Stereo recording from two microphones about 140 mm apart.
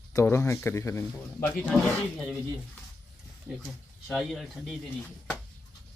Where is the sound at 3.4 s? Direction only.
Centre (ahead or behind).